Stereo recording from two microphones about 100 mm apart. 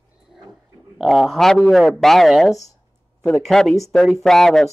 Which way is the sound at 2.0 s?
Centre (ahead or behind).